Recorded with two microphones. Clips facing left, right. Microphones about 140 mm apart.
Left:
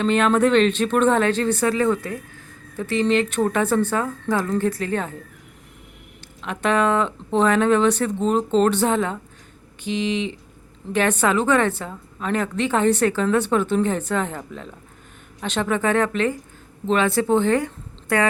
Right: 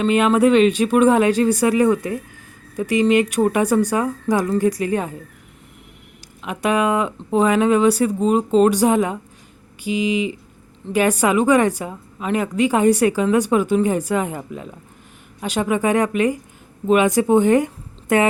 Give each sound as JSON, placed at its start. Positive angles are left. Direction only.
{"t": 0.0, "sound": "a woman's voice", "side_deg": -5}
{"t": 6.4, "sound": "a woman's voice", "side_deg": -10}